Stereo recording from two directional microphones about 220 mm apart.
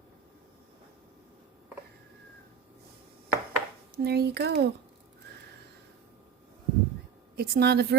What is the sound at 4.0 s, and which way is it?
Speech, 45° right (ahead or behind).